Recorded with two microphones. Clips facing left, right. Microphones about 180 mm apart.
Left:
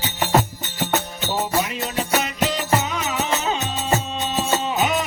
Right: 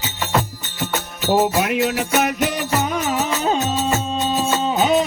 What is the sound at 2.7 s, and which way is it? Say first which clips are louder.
Music: right 4 dB; 50° right (ahead or behind).